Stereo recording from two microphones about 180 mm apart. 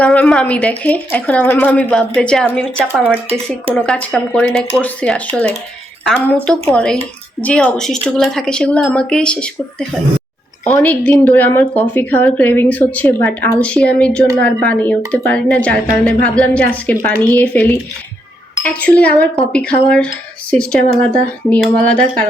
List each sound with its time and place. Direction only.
0.0 s speech: 5° left (ahead or behind)
3.2 s speech: 35° right (ahead or behind)
3.8 s speech: 5° left (ahead or behind)
20.5 s speech: 5° left (ahead or behind)